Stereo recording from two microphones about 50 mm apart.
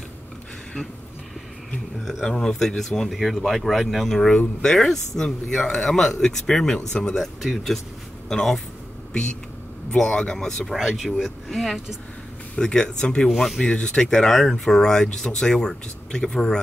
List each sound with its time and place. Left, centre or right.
2.2 s speech: centre
4.4 s speech: left
4.7 s speech: centre
7.4 s speech: centre
9.9 s speech: centre
10.7 s speech: centre
12.5 s speech: centre
13.3 s speech: centre
13.6 s speech: centre